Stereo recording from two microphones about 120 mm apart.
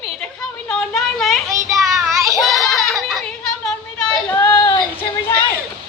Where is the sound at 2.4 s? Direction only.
Centre (ahead or behind).